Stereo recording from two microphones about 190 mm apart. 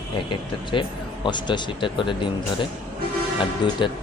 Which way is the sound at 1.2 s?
25° left (ahead or behind).